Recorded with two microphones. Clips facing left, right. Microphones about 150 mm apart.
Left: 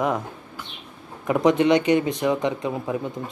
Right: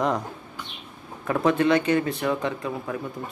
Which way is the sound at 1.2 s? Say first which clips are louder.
Left 3 dB; 15° left (ahead or behind).